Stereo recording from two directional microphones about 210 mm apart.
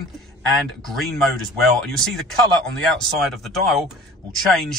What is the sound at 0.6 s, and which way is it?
Speech, centre (ahead or behind).